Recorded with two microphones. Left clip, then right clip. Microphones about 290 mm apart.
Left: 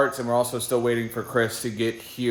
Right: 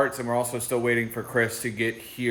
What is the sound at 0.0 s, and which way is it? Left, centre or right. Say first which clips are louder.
Speech: left 3 dB; centre.